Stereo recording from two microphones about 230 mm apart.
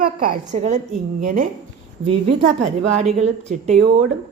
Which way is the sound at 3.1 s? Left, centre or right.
Right.